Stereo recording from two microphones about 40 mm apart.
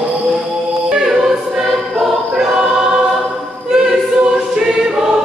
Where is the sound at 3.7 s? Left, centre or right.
Centre.